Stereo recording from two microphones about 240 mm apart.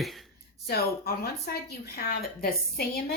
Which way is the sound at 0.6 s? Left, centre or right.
Left.